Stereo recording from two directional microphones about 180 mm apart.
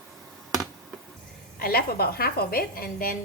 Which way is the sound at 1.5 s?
55° left (ahead or behind).